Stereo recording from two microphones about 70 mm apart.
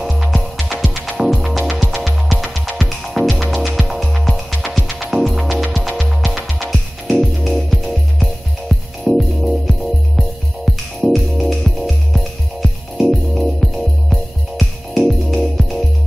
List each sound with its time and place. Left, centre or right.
0.0 s music: centre